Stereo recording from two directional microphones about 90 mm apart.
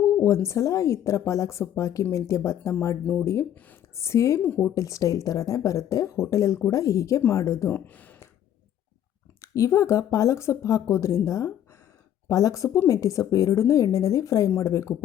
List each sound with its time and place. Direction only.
0.0 s speech: 35° left (ahead or behind)
3.9 s speech: 30° left (ahead or behind)
7.7 s speech: 20° left (ahead or behind)
9.4 s speech: 35° left (ahead or behind)